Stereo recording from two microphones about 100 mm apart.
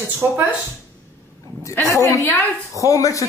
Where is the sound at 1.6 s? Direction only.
30° left (ahead or behind).